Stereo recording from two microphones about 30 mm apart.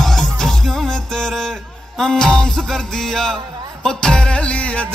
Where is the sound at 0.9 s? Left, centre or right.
Centre.